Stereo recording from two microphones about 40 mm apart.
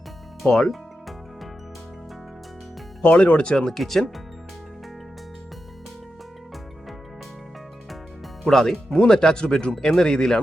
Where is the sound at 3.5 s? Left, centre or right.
Left.